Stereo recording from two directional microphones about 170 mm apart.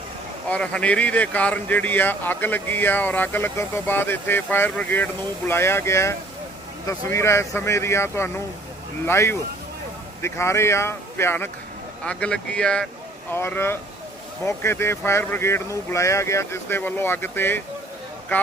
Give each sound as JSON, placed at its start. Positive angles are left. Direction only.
{"t": 0.4, "sound": "speech", "side_deg": 5}